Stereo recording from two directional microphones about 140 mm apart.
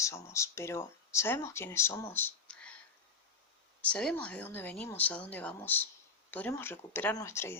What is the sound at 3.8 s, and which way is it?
Speech, 10° left (ahead or behind).